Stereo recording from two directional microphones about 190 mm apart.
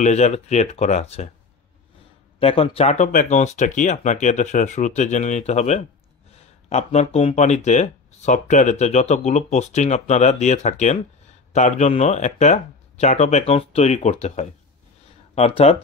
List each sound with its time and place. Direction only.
0.0 s speech: 35° left (ahead or behind)
2.4 s speech: 30° left (ahead or behind)